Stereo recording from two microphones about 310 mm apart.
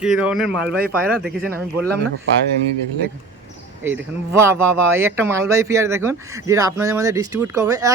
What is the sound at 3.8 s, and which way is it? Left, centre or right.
Speech, centre.